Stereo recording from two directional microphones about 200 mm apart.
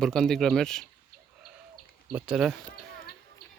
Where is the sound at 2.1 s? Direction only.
5° right (ahead or behind).